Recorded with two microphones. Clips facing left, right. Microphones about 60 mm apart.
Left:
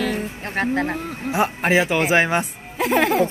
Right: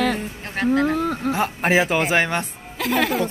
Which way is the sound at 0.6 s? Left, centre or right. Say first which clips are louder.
Right 3 dB; left.